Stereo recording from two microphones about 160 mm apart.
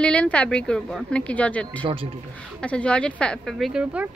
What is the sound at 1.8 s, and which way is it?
Speech, 35° right (ahead or behind).